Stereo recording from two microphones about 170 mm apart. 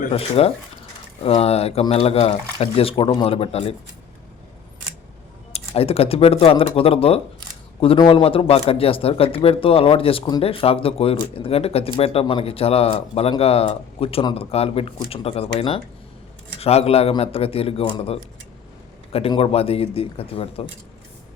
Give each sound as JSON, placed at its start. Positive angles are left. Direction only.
{"t": 0.1, "sound": "speech", "side_deg": 35}
{"t": 5.5, "sound": "speech", "side_deg": 35}